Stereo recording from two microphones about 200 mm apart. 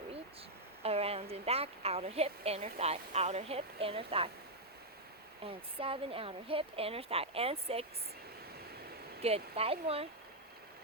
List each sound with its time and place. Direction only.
0.8 s a woman's voice: 30° right (ahead or behind)
5.5 s speech: 25° right (ahead or behind)
9.2 s speech: 30° right (ahead or behind)